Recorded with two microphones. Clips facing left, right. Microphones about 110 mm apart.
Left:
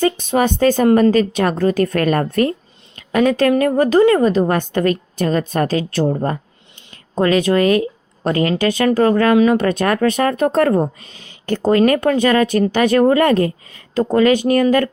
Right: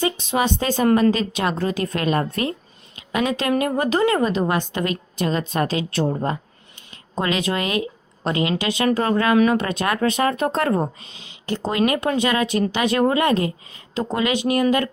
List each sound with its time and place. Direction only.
0.0 s a woman's voice: 45° left (ahead or behind)
7.2 s a woman's voice: 40° left (ahead or behind)